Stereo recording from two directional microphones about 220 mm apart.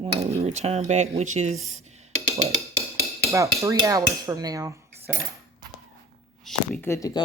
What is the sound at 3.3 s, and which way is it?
Dishes, 15° right (ahead or behind).